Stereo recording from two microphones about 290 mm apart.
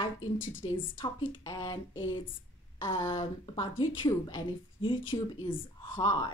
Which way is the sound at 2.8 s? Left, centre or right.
Centre.